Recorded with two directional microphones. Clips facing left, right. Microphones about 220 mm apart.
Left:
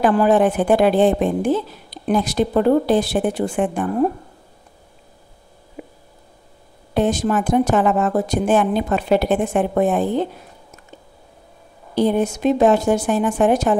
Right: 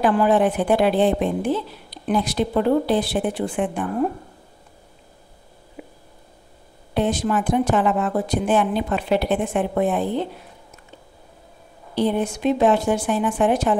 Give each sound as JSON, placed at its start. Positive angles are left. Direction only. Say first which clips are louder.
{"t": 0.0, "sound": "a woman's voice", "louder": "left 3 dB", "side_deg": 45}
{"t": 5.8, "sound": "a sound", "louder": "left 3 dB", "side_deg": 45}
{"t": 6.9, "sound": "a woman's voice", "louder": "left 3 dB", "side_deg": 45}
{"t": 11.9, "sound": "a woman's voice", "louder": "left 3 dB", "side_deg": 45}